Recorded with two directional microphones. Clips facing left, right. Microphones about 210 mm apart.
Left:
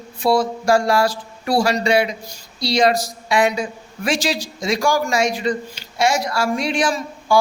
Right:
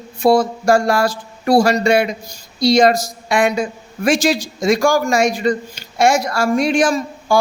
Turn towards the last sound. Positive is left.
turn(degrees=-45)  # may be behind; listen again after turning